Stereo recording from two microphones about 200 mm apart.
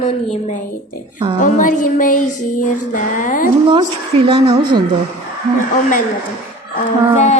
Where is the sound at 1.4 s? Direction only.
40° left (ahead or behind).